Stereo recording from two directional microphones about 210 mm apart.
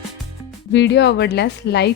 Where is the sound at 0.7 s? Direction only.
55° left (ahead or behind).